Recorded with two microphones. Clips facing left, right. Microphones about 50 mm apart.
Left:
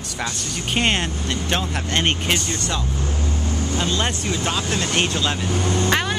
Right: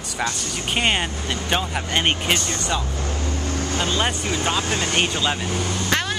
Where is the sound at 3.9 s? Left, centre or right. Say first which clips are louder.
Even; centre.